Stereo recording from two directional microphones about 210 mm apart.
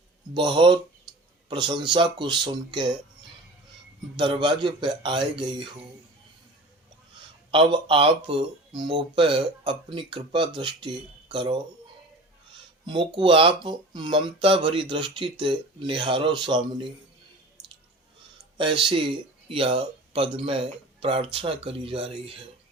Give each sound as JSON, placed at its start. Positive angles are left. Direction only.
{"t": 0.3, "sound": "speech", "side_deg": -25}
{"t": 4.2, "sound": "speech", "side_deg": -25}
{"t": 7.5, "sound": "speech", "side_deg": -25}
{"t": 12.8, "sound": "speech", "side_deg": -20}
{"t": 18.5, "sound": "speech", "side_deg": -25}